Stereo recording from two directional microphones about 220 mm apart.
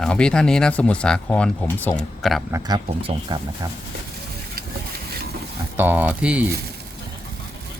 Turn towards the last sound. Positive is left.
turn(degrees=-5)  # may be behind; listen again after turning